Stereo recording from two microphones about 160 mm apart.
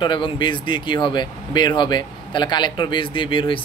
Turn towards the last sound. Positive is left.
turn(degrees=30)  # may be behind; listen again after turning